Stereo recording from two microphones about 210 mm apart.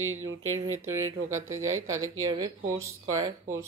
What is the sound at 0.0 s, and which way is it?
Speech, 75° right (ahead or behind).